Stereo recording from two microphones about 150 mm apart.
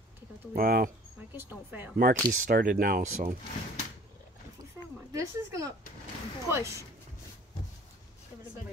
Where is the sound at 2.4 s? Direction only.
70° right (ahead or behind).